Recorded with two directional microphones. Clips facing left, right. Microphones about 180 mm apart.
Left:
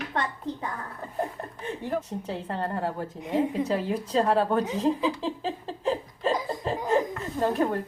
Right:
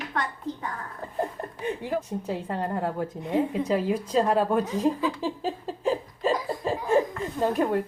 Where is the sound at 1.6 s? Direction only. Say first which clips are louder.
Right 2 dB; 10° right (ahead or behind).